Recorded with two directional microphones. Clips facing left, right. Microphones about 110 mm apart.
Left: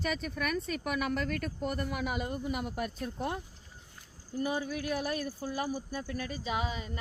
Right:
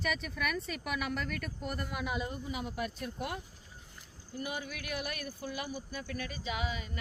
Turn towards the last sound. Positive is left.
turn(degrees=30)  # may be behind; listen again after turning